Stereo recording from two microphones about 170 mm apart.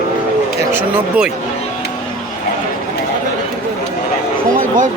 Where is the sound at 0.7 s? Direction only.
5° right (ahead or behind).